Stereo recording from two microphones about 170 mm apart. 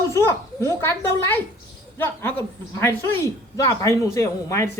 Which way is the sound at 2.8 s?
20° left (ahead or behind).